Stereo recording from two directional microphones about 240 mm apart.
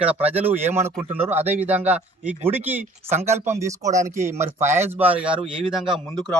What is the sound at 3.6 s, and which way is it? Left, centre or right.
Speech, centre.